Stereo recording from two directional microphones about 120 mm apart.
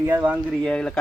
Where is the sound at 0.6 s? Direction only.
10° left (ahead or behind).